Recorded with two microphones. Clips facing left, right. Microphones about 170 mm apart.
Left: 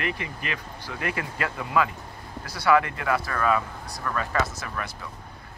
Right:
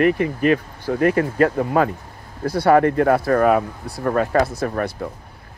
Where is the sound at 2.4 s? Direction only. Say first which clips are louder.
Right 7 dB; 55° right (ahead or behind).